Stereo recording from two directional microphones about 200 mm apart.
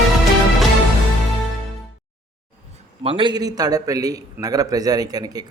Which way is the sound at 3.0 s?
25° right (ahead or behind).